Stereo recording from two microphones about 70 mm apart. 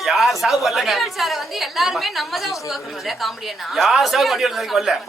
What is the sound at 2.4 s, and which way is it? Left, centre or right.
Speech, left.